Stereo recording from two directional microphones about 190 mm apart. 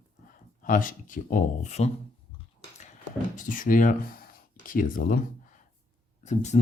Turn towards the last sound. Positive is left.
turn(degrees=40)  # may be behind; listen again after turning